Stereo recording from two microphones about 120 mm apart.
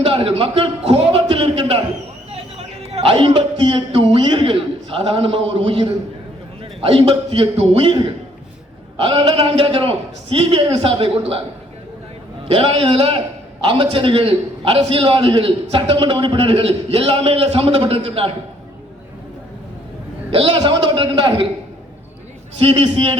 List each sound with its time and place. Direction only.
0.0 s a sound: 50° right (ahead or behind)
2.3 s a man's voice: 55° right (ahead or behind)
12.5 s a man's voice: 45° right (ahead or behind)
20.3 s a man's voice: 45° right (ahead or behind)
22.6 s a man's voice: 45° right (ahead or behind)